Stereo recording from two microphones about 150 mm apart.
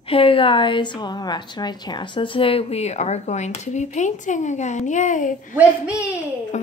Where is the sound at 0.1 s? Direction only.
35° left (ahead or behind); by 5.6 s 60° left (ahead or behind).